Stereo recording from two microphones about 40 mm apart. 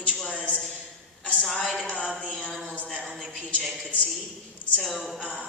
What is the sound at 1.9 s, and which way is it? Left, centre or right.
Music, left.